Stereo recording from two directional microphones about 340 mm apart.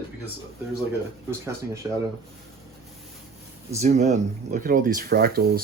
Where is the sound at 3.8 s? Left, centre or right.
Centre.